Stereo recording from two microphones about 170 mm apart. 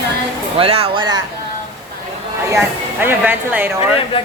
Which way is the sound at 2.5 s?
10° right (ahead or behind).